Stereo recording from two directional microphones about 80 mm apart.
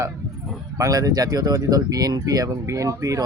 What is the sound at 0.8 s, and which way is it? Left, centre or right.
Speech, right.